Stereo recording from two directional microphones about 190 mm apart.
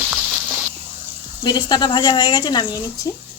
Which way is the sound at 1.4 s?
20° left (ahead or behind).